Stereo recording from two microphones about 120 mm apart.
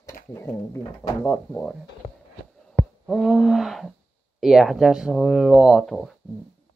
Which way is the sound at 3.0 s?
Centre (ahead or behind).